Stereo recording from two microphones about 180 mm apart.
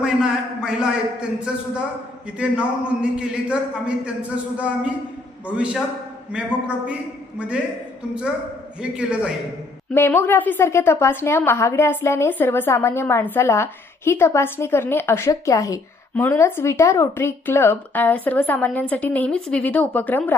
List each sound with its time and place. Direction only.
0.0 s a man's voice: 5° right (ahead or behind)
8.8 s a man's voice: 5° right (ahead or behind)
9.9 s a woman's voice: 15° left (ahead or behind)